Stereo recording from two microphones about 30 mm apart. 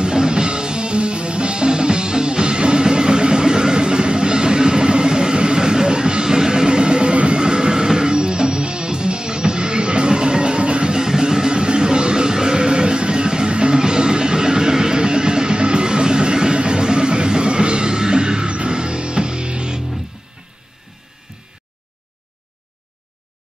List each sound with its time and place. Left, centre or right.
0.0 s music: right
7.4 s music: right